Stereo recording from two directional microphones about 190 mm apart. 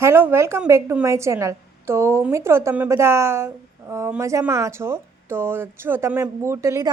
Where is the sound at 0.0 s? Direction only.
10° right (ahead or behind).